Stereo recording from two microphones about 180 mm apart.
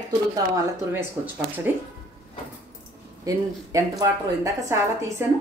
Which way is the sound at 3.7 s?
20° right (ahead or behind).